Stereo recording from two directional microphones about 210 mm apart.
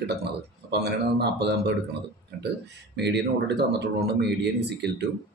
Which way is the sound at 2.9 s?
55° right (ahead or behind).